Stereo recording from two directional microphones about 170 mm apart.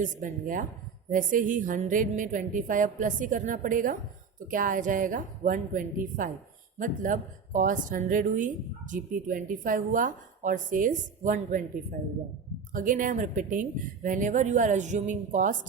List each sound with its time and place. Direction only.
0.0 s a woman's voice: 50° right (ahead or behind)
12.7 s a woman's voice: 50° right (ahead or behind)